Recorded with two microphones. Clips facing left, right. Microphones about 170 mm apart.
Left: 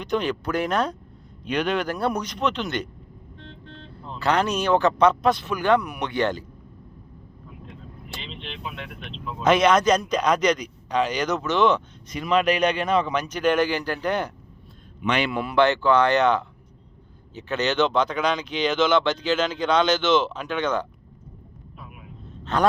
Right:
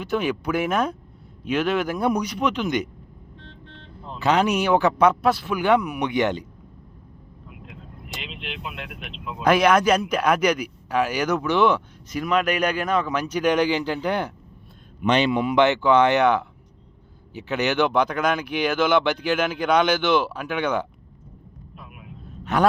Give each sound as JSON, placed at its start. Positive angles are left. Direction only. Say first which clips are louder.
{"t": 0.0, "sound": "speech", "louder": "right 1 dB", "side_deg": -5}
{"t": 4.2, "sound": "speech", "louder": "right 2 dB", "side_deg": -15}
{"t": 9.1, "sound": "speech", "louder": "even", "side_deg": -5}
{"t": 12.1, "sound": "speech", "louder": "left 1 dB", "side_deg": 0}
{"t": 17.3, "sound": "speech", "louder": "right 1 dB", "side_deg": -15}